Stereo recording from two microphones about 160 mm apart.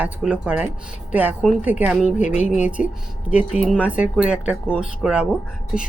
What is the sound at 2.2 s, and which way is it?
Speech, 45° left (ahead or behind).